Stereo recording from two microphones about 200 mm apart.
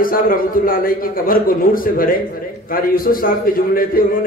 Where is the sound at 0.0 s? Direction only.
45° left (ahead or behind).